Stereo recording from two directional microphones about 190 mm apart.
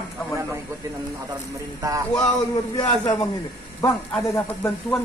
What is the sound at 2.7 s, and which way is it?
A man's voice, 20° left (ahead or behind).